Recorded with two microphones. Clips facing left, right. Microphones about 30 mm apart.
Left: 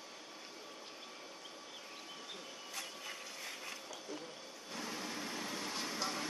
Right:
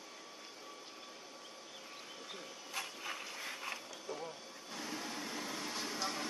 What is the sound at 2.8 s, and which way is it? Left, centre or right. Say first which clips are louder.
Vehicle: right 4 dB; centre.